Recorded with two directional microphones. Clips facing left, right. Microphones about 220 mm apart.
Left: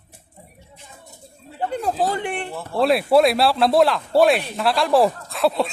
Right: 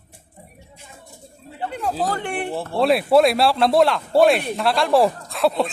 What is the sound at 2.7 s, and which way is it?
Speech, centre (ahead or behind).